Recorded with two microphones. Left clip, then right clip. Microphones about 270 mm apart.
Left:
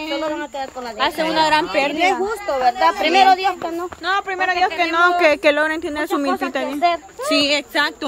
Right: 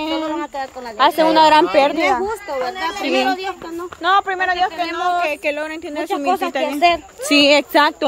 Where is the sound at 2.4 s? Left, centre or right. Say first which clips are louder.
Left 6 dB; centre.